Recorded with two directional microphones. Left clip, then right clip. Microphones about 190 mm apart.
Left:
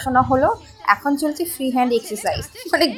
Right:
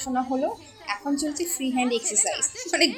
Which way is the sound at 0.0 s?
10° left (ahead or behind).